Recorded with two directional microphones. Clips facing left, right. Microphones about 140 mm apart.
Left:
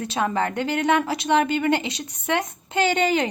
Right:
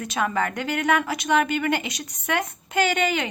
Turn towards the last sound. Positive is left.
turn(degrees=30)  # may be behind; listen again after turning